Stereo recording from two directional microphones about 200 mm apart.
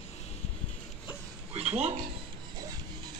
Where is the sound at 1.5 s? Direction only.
30° right (ahead or behind).